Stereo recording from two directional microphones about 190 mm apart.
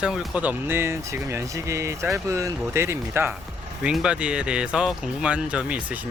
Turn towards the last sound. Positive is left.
turn(degrees=-5)  # may be behind; listen again after turning